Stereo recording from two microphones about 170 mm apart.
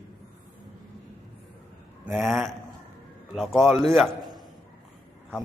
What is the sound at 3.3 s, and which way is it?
Speech, centre (ahead or behind).